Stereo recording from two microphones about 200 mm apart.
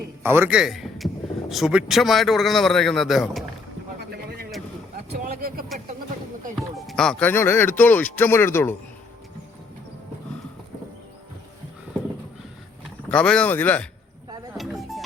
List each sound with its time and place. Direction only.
0.2 s a man's voice: 10° right (ahead or behind)
4.1 s vehicle: 50° right (ahead or behind)
6.6 s speech: centre (ahead or behind)
13.1 s speech: 5° left (ahead or behind)
14.5 s music: centre (ahead or behind)